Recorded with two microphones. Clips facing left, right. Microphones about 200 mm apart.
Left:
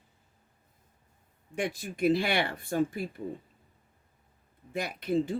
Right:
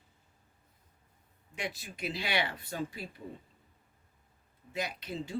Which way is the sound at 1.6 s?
50° left (ahead or behind).